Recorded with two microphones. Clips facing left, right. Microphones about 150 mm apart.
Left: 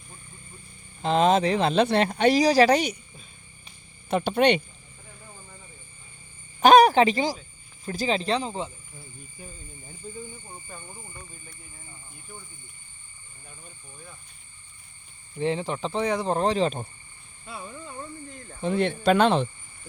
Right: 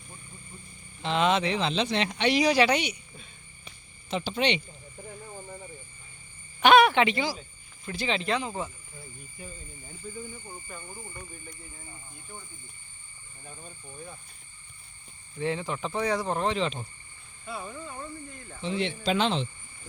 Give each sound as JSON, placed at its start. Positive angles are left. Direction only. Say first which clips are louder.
{"t": 1.0, "sound": "speech", "louder": "left 5 dB", "side_deg": 40}
{"t": 4.1, "sound": "speech", "louder": "left 7 dB", "side_deg": 55}
{"t": 6.6, "sound": "speech", "louder": "left 4 dB", "side_deg": 40}
{"t": 15.4, "sound": "speech", "louder": "left 3 dB", "side_deg": 25}
{"t": 18.6, "sound": "speech", "louder": "left 6 dB", "side_deg": 50}